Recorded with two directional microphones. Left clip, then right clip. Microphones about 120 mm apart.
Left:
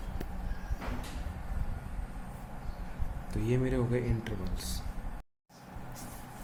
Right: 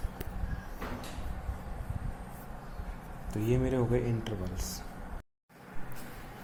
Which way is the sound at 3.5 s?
20° right (ahead or behind).